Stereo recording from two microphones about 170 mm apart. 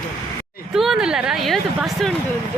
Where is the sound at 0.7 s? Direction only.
Centre (ahead or behind).